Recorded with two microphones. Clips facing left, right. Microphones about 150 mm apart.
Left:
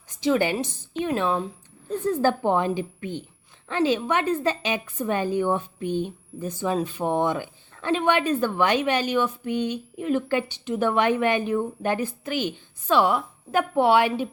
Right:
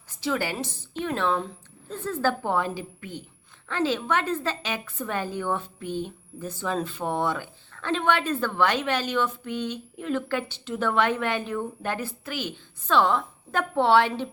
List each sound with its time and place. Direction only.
0.1 s a woman's voice: 20° left (ahead or behind)